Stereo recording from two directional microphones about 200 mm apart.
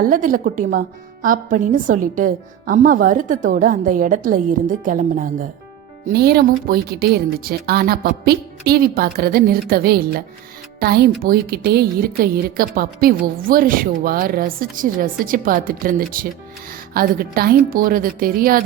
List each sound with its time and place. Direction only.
0.0 s a woman's voice: 45° right (ahead or behind)